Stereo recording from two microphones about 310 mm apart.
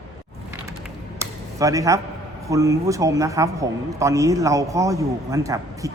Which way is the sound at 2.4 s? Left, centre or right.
Centre.